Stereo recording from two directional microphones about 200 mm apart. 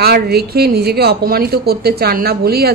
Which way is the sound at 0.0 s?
50° right (ahead or behind).